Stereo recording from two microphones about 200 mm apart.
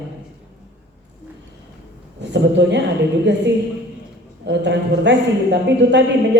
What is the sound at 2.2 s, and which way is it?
A man's voice, 60° right (ahead or behind).